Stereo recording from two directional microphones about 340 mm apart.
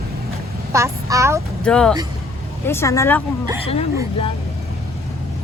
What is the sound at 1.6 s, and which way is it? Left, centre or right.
Speech, centre.